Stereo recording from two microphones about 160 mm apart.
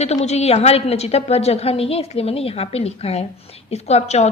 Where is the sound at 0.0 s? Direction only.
45° left (ahead or behind).